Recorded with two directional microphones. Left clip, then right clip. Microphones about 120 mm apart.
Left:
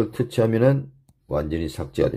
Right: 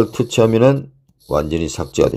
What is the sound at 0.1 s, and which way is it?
Speech, 25° right (ahead or behind).